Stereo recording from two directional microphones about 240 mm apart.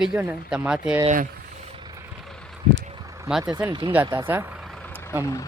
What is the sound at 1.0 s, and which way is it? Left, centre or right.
Vehicle, right.